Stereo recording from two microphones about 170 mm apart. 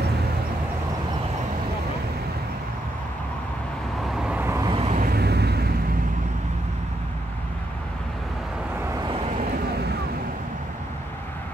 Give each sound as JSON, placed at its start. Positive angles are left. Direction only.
{"t": 4.1, "sound": "vehicle", "side_deg": -5}
{"t": 4.6, "sound": "vehicle", "side_deg": -35}
{"t": 5.0, "sound": "a sound", "side_deg": -70}
{"t": 9.7, "sound": "vehicle", "side_deg": -70}